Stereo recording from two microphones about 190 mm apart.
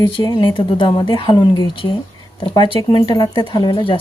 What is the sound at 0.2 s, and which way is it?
Speech, 20° left (ahead or behind).